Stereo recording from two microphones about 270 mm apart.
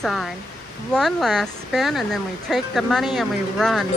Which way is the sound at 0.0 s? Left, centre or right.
Centre.